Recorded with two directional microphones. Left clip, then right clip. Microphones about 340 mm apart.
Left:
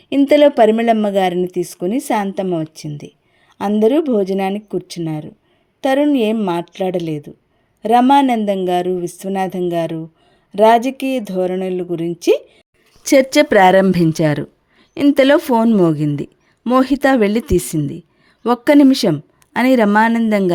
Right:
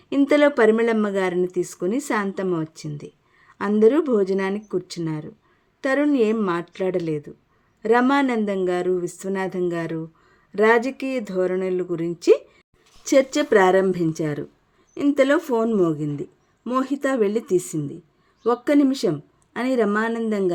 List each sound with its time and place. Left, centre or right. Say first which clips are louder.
0.1 s speech: left 7 dB; centre